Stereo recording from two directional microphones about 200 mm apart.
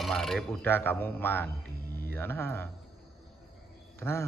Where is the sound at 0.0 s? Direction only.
Centre (ahead or behind).